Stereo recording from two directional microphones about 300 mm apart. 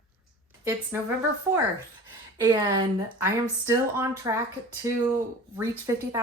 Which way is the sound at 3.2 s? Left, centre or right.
Centre.